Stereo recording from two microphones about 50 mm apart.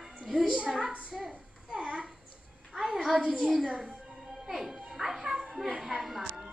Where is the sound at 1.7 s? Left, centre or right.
Centre.